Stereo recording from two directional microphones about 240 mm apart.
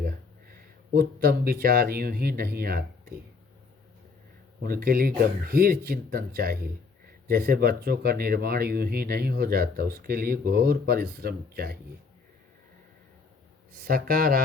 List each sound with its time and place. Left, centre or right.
0.9 s speech: right
4.6 s speech: right
13.7 s speech: right